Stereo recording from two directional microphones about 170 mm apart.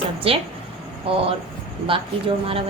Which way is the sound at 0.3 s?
35° right (ahead or behind).